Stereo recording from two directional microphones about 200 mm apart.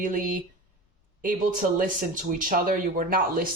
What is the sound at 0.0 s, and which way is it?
Speech, 45° right (ahead or behind).